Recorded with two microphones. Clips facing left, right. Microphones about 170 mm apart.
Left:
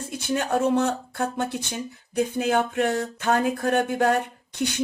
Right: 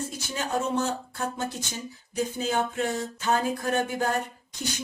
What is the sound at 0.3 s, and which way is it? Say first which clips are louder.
Speech: left 5 dB; 60° left (ahead or behind).